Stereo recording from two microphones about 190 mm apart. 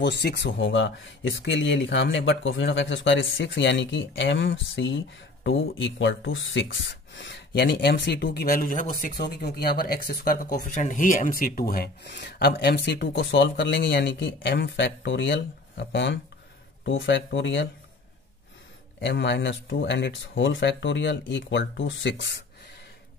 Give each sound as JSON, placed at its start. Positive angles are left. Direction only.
{"t": 0.0, "sound": "speech", "side_deg": 60}
{"t": 18.9, "sound": "speech", "side_deg": 65}